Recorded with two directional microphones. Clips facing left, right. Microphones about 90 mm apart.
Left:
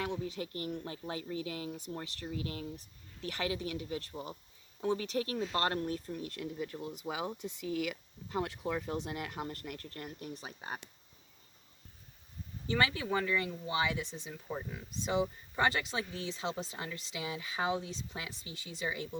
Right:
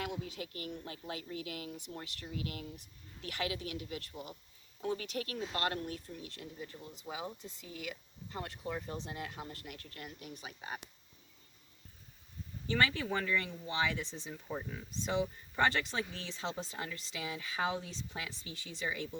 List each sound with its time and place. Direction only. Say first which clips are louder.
0.0 s speech: left 3 dB; 35° left (ahead or behind)
6.1 s speech: left 7 dB; 50° left (ahead or behind)
7.1 s speech: left 4 dB; 80° left; by 10.8 s 35° left (ahead or behind)
12.7 s speech: left 1 dB; 15° left (ahead or behind)